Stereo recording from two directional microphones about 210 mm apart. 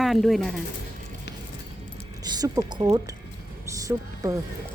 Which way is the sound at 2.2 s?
20° right (ahead or behind).